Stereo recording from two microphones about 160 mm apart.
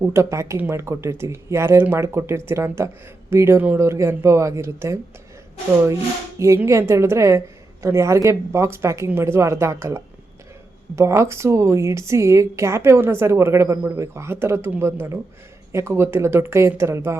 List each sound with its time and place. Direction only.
0.0 s speech: 15° right (ahead or behind)
6.4 s speech: 15° right (ahead or behind)
10.9 s speech: 15° right (ahead or behind)